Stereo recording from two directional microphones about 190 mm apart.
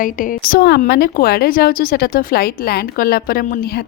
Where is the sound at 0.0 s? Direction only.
45° left (ahead or behind).